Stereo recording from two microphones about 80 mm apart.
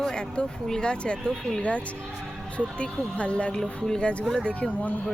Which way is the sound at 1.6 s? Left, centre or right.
Centre.